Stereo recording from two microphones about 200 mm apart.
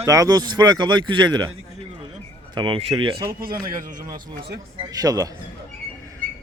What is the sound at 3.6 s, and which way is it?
Speech, 45° right (ahead or behind).